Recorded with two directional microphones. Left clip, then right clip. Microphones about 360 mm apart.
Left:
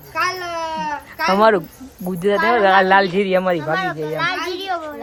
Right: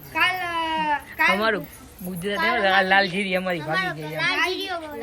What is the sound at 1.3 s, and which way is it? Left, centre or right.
A woman's voice, centre.